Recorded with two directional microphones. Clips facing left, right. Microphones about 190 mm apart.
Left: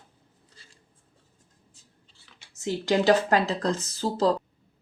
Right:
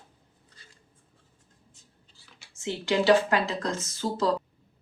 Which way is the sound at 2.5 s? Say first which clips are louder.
Left 2 dB; 40° left (ahead or behind).